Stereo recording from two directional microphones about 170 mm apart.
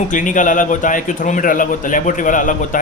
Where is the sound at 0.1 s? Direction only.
50° left (ahead or behind).